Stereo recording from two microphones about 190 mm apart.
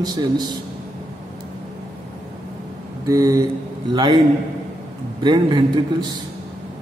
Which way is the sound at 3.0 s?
15° right (ahead or behind).